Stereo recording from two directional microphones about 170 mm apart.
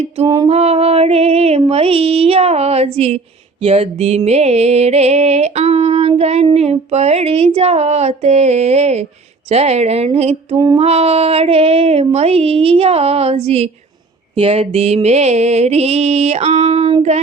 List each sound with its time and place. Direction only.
0.3 s music: 40° right (ahead or behind)
10.5 s female singing: 20° right (ahead or behind)
10.8 s music: 35° right (ahead or behind)